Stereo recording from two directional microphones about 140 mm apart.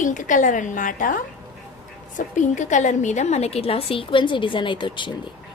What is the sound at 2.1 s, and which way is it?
A woman's voice, 60° left (ahead or behind).